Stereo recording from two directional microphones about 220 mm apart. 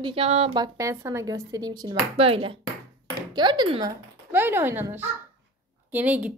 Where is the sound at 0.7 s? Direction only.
15° right (ahead or behind).